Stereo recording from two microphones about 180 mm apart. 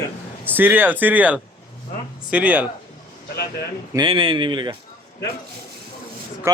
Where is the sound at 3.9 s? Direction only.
25° right (ahead or behind).